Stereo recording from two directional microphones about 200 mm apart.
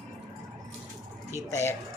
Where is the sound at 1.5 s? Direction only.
15° left (ahead or behind).